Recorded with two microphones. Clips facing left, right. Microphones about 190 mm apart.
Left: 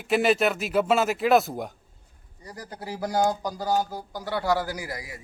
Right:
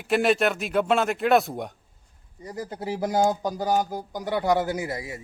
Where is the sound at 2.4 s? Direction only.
20° right (ahead or behind).